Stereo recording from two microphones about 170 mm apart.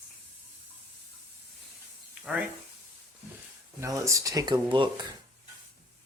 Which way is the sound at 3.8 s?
20° right (ahead or behind).